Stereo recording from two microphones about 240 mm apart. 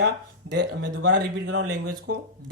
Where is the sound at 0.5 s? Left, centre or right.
Right.